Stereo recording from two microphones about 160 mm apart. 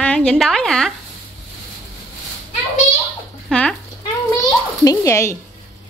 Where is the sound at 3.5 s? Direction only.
5° left (ahead or behind).